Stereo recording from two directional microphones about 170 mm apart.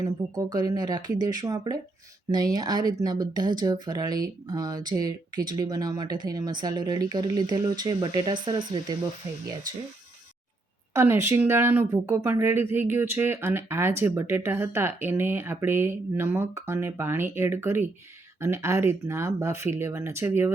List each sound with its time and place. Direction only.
0.0 s speech: 20° right (ahead or behind)
10.9 s speech: 15° right (ahead or behind)